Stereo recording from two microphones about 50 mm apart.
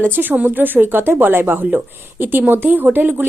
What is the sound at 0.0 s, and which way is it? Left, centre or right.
Speech, right.